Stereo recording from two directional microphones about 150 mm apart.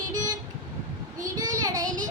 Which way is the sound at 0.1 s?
25° right (ahead or behind).